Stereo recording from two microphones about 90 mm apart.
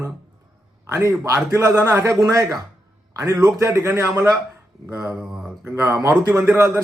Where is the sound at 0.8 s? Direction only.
30° right (ahead or behind).